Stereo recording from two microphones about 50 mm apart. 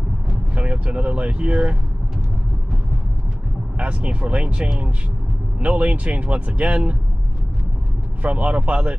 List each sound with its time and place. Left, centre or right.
0.8 s speech: right
3.7 s speech: right
8.2 s speech: right